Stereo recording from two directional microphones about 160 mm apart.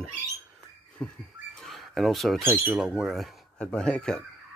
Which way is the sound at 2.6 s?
5° right (ahead or behind).